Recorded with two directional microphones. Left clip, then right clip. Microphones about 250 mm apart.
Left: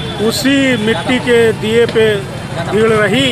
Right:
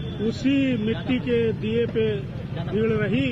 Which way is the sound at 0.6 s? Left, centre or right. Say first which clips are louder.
Left 13 dB; left.